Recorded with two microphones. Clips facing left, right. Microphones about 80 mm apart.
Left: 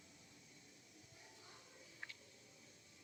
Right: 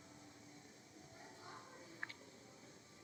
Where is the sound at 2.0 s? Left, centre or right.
Right.